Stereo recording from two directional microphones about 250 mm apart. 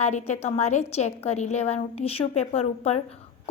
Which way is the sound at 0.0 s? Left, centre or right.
Left.